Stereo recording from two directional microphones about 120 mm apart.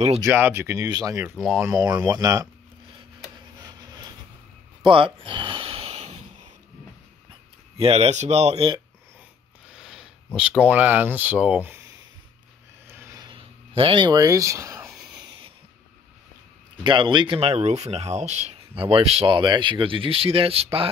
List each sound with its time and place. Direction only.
0.2 s speech: 20° right (ahead or behind)
0.8 s speech: 30° right (ahead or behind)
1.3 s speech: 5° right (ahead or behind)
1.6 s speech: 30° right (ahead or behind)
3.5 s a sound: 30° right (ahead or behind)
4.8 s gasp: 50° right (ahead or behind); by 6.2 s 65° right (ahead or behind)
7.7 s speech: 60° right (ahead or behind)
9.7 s speech: 5° right (ahead or behind)
12.8 s a sound: 20° right (ahead or behind)
13.2 s a sound: 45° right (ahead or behind); by 14.9 s 25° right (ahead or behind)
16.8 s speech: 40° right (ahead or behind)
17.5 s speech: 60° right (ahead or behind)
18.8 s speech: 50° right (ahead or behind)